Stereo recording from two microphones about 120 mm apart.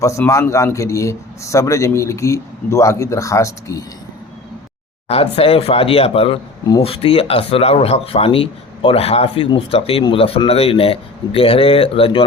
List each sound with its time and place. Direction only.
0.0 s a man's voice: 25° left (ahead or behind)
5.0 s speech: 60° left (ahead or behind)